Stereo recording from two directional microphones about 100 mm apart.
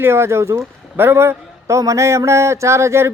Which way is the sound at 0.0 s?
25° right (ahead or behind).